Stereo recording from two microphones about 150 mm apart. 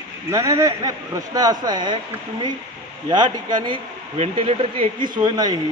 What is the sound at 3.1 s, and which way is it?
Speech, 30° right (ahead or behind).